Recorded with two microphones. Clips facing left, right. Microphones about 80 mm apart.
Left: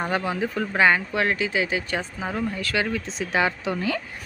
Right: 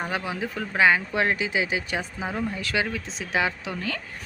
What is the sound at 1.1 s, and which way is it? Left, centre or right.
Speech, centre.